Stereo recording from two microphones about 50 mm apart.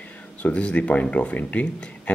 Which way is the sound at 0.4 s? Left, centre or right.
Left.